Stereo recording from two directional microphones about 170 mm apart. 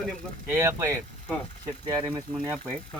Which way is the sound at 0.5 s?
15° right (ahead or behind).